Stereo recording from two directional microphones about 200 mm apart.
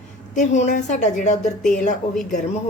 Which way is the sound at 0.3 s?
35° left (ahead or behind).